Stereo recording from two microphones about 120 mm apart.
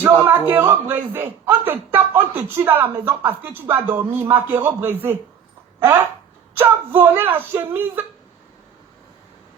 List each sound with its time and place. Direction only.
0.3 s speech: 15° right (ahead or behind)